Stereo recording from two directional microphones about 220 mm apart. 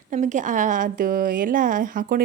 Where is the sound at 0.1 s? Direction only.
35° right (ahead or behind).